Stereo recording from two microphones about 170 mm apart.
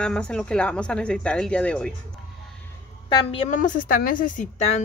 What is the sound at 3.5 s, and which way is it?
A woman's voice, 50° left (ahead or behind).